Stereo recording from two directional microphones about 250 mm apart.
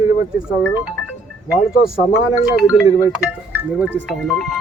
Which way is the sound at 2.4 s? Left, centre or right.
Centre.